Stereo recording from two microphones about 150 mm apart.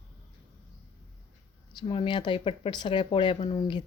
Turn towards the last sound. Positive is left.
turn(degrees=30)  # may be behind; listen again after turning